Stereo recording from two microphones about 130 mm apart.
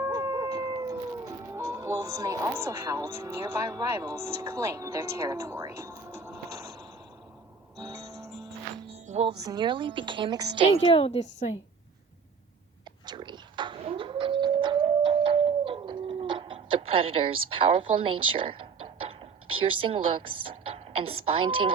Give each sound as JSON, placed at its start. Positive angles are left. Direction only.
{"t": 0.0, "sound": "howl", "side_deg": -25}
{"t": 6.3, "sound": "a sound", "side_deg": -25}
{"t": 7.8, "sound": "music", "side_deg": -25}
{"t": 8.9, "sound": "music", "side_deg": -55}
{"t": 9.4, "sound": "a woman's voice", "side_deg": -35}
{"t": 10.8, "sound": "a woman's voice", "side_deg": 45}
{"t": 13.1, "sound": "cat", "side_deg": -35}